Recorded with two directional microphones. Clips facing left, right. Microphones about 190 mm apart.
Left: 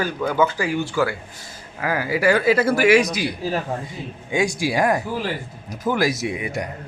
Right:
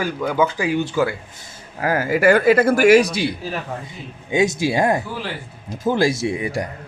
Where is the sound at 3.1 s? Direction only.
25° right (ahead or behind).